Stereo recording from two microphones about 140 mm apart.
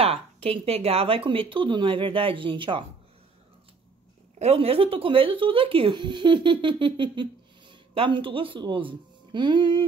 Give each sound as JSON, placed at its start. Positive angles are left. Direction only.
{"t": 0.0, "sound": "speech", "side_deg": -45}
{"t": 4.4, "sound": "speech", "side_deg": -45}